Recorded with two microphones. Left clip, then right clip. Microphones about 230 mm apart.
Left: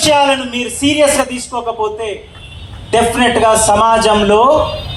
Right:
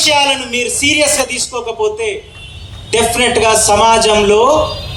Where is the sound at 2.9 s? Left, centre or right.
Left.